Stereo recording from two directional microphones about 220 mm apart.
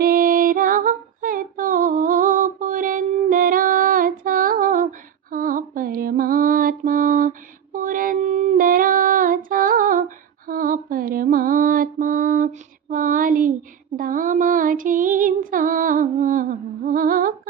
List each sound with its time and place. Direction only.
0.0 s female singing: 40° right (ahead or behind)
10.4 s mantra: 40° right (ahead or behind)
13.9 s female singing: 40° right (ahead or behind)